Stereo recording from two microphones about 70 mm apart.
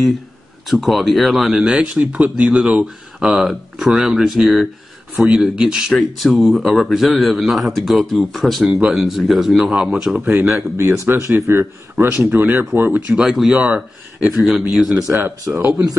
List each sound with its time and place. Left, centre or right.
0.7 s a man's voice: centre
1.6 s a man's voice: centre
10.3 s speech: right
13.1 s speech: centre
13.6 s speech: centre
14.3 s a man's voice: centre
15.0 s speech: right